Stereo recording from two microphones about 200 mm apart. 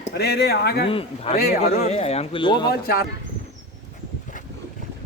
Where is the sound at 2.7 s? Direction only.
50° left (ahead or behind).